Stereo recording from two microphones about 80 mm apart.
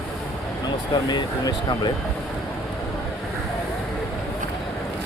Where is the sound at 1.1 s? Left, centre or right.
Left.